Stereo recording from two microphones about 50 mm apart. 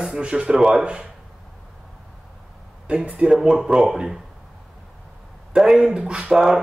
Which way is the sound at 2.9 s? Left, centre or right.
Right.